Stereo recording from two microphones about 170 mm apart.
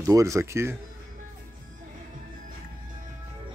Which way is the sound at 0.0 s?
20° right (ahead or behind).